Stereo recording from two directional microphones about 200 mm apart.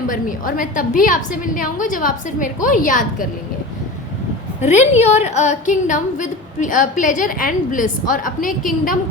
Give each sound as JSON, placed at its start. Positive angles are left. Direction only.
{"t": 0.1, "sound": "a woman's voice", "side_deg": 45}
{"t": 4.6, "sound": "a woman's voice", "side_deg": 35}